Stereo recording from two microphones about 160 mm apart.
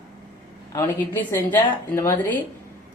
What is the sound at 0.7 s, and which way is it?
Speech, 15° left (ahead or behind).